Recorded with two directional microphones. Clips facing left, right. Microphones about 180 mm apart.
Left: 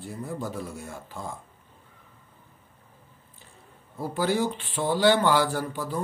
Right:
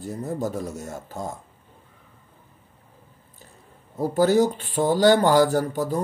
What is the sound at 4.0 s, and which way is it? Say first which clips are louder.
Speech: right 7 dB; 40° right (ahead or behind).